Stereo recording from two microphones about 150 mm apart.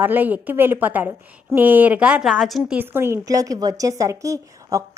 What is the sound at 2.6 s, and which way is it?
A woman's voice, 10° right (ahead or behind).